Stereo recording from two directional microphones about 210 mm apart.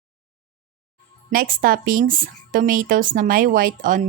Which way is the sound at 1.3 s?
40° right (ahead or behind).